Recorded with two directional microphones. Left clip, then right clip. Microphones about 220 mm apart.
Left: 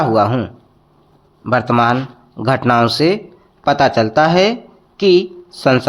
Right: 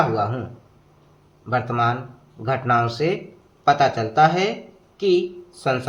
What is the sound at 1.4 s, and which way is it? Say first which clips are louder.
Speech: left 8 dB; 40° left (ahead or behind).